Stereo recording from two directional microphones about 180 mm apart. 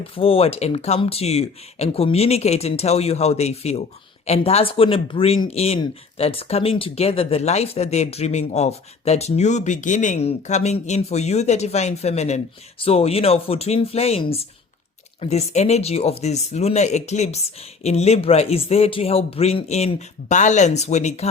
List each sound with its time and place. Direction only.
0.0 s speech: 30° left (ahead or behind)